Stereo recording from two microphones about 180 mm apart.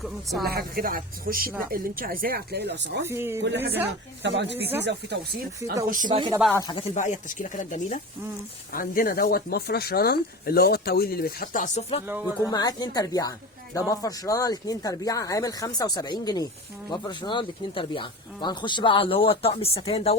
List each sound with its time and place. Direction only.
0.0 s speech: centre (ahead or behind)
0.4 s a woman's voice: 55° right (ahead or behind); by 3.1 s 75° right (ahead or behind)
3.1 s speech: 15° right (ahead or behind)
3.4 s speech: 70° right (ahead or behind)
4.2 s speech: 85° right
4.5 s speech: 10° right (ahead or behind)
4.8 s speech: 70° right (ahead or behind)
6.1 s speech: 25° right (ahead or behind)
6.5 s speech: 15° left (ahead or behind)
6.7 s speech: 35° left (ahead or behind)
8.7 s speech: 55° left (ahead or behind); by 11.9 s 40° left (ahead or behind)
12.2 s speech: 20° left (ahead or behind)